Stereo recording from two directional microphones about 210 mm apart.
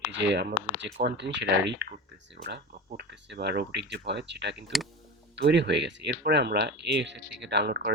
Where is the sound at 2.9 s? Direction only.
55° right (ahead or behind).